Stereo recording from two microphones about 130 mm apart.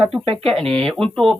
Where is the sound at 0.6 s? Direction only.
50° right (ahead or behind).